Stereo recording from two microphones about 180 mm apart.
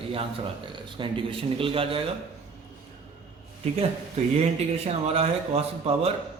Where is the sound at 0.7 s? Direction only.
30° right (ahead or behind).